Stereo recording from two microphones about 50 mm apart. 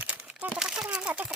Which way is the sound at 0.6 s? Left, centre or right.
Centre.